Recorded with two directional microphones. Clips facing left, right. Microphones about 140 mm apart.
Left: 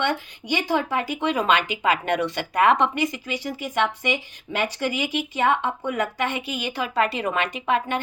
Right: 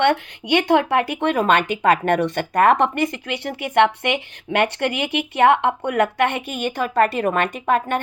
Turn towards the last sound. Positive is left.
turn(degrees=-50)  # may be behind; listen again after turning